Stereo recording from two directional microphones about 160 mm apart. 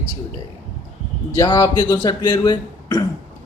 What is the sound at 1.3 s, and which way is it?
Speech, 25° left (ahead or behind).